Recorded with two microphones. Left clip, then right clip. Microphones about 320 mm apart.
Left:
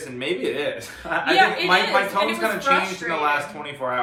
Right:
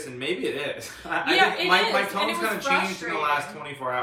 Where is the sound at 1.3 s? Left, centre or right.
Centre.